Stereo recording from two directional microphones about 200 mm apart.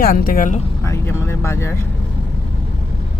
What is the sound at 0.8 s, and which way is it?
Speech, 15° left (ahead or behind).